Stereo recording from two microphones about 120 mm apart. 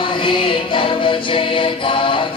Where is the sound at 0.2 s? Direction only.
45° left (ahead or behind).